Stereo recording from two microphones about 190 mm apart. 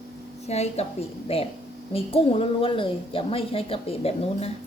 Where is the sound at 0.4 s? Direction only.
35° left (ahead or behind).